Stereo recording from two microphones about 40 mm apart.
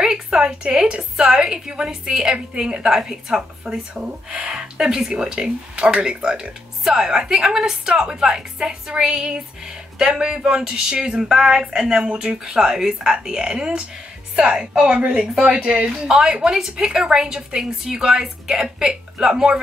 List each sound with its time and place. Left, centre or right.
0.0 s a woman's voice: centre